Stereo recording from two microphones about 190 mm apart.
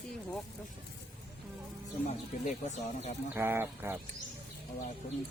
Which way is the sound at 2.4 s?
40° left (ahead or behind).